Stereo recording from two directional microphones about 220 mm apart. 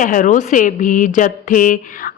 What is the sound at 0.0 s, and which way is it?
Speech, 35° left (ahead or behind).